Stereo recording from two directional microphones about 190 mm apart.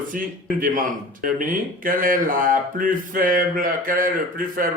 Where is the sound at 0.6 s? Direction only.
45° right (ahead or behind).